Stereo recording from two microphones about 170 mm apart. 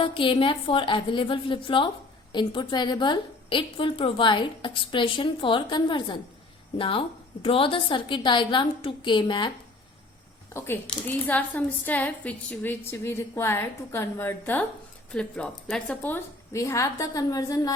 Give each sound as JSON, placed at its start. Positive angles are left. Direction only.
{"t": 0.0, "sound": "a woman's voice", "side_deg": 30}
{"t": 10.5, "sound": "a woman's voice", "side_deg": 15}